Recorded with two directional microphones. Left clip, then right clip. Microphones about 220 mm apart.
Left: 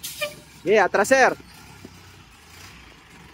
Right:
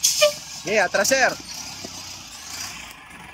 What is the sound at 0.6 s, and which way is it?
Speech, 5° left (ahead or behind).